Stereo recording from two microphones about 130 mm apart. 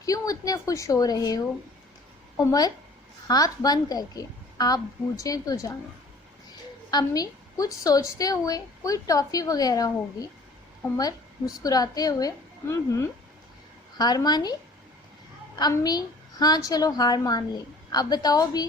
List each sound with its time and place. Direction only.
0.0 s a woman's voice: 25° left (ahead or behind)
2.4 s a woman's voice: 30° left (ahead or behind)
6.9 s a woman's voice: 30° left (ahead or behind)
14.0 s a child's voice: 30° left (ahead or behind)
15.8 s a child's voice: 30° left (ahead or behind)